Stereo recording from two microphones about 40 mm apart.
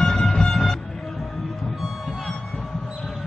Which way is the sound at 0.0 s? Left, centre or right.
Centre.